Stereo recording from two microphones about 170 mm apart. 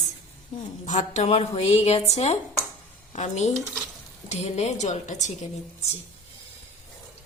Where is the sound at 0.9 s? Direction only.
45° left (ahead or behind).